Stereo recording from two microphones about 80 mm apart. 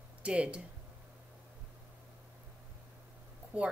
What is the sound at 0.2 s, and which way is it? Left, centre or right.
Speech, centre.